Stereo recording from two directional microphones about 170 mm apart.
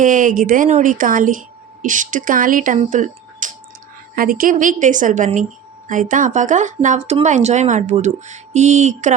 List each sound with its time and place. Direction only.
0.0 s speech: 50° right (ahead or behind)